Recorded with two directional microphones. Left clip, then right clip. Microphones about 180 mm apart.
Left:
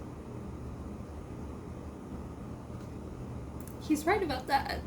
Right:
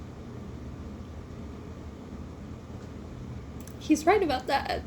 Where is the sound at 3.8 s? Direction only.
25° right (ahead or behind).